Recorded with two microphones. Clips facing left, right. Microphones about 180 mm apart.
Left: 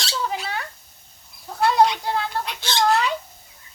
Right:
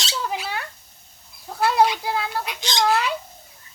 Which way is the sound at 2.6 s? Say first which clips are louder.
Left 1 dB; 15° right (ahead or behind).